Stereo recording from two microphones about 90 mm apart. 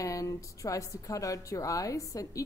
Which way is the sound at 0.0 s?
40° left (ahead or behind).